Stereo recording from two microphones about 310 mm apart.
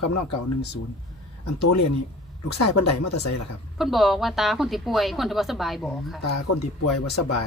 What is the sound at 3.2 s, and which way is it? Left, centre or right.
Speech, left.